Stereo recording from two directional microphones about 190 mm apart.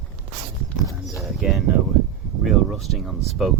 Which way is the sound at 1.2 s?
Centre (ahead or behind).